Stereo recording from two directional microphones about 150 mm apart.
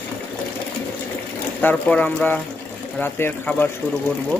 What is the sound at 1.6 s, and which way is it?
Speech, 10° left (ahead or behind).